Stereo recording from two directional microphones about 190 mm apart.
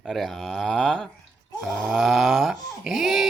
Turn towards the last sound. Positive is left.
turn(degrees=0)  # may be behind; listen again after turning